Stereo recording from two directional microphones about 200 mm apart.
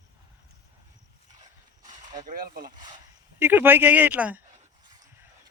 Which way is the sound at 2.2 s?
45° right (ahead or behind).